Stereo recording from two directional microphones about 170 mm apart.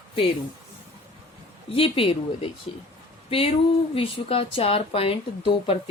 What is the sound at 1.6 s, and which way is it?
A woman's voice, 35° left (ahead or behind).